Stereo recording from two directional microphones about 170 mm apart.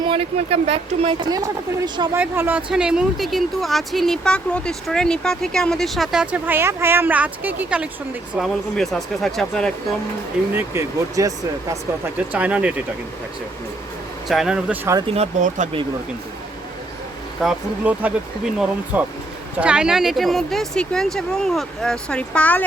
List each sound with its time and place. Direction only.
0.1 s speech: 35° right (ahead or behind)
1.3 s speech: 25° right (ahead or behind)
2.1 s speech: 10° right (ahead or behind)
10.5 s speech: 20° right (ahead or behind)
12.3 s speech: 5° right (ahead or behind)
14.3 s speech: 5° right (ahead or behind)
15.1 s speech: 40° right (ahead or behind)
17.4 s speech: 10° right (ahead or behind); by 22.6 s 10° left (ahead or behind)